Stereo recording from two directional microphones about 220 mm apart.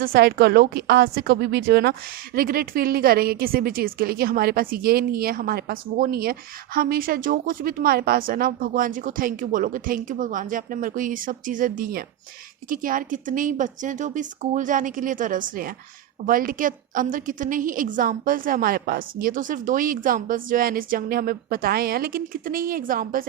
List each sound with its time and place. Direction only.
0.0 s a woman's voice: 45° right (ahead or behind)